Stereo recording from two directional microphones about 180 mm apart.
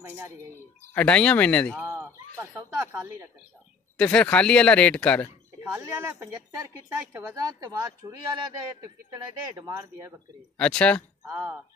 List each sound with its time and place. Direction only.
0.0 s bird: 15° right (ahead or behind)
0.9 s speech: 5° left (ahead or behind)
1.8 s a sound: 15° right (ahead or behind)
4.0 s speech: 5° left (ahead or behind)
5.6 s speech: 15° right (ahead or behind)
10.6 s speech: 5° left (ahead or behind)
11.2 s speech: 15° right (ahead or behind)